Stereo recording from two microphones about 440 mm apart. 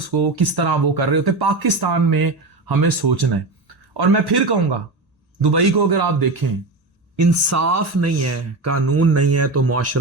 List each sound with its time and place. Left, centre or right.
0.1 s speech: right
7.2 s speech: right